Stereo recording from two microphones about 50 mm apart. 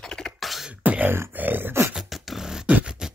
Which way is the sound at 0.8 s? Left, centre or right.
Right.